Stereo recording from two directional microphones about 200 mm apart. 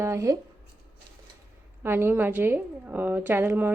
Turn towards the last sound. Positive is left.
turn(degrees=-10)  # may be behind; listen again after turning